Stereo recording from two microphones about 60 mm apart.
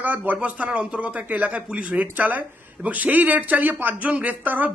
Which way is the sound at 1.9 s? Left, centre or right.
Right.